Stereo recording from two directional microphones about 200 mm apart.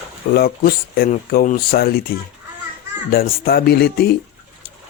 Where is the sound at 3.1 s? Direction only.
50° left (ahead or behind).